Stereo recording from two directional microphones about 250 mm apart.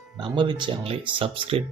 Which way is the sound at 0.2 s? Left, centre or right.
Centre.